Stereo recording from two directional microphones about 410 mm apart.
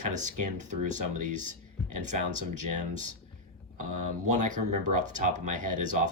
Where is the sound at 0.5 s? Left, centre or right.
Centre.